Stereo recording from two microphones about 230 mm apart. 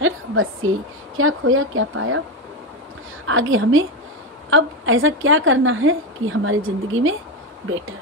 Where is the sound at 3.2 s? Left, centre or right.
Right.